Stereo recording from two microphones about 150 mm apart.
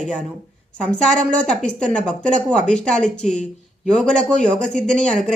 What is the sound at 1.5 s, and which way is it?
A woman's voice, 5° left (ahead or behind).